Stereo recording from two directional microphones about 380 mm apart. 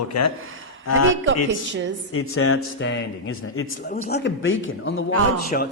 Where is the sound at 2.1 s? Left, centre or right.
Left.